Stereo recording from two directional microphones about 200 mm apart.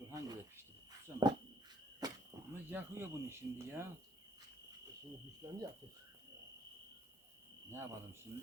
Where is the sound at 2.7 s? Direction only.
10° right (ahead or behind).